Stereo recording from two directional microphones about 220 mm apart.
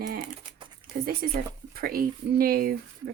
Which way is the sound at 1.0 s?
45° right (ahead or behind).